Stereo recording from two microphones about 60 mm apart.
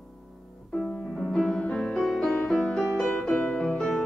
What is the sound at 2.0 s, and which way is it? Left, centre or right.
Music, centre.